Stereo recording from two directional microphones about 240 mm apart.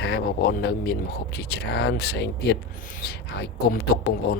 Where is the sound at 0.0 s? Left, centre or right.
Left.